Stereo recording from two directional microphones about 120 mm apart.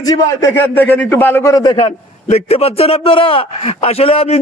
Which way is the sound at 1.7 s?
60° left (ahead or behind).